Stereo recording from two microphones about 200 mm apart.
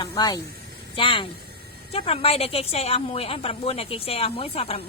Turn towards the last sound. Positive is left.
turn(degrees=30)  # may be behind; listen again after turning